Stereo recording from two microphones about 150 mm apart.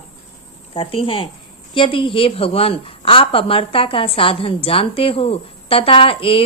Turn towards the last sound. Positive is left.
turn(degrees=35)  # may be behind; listen again after turning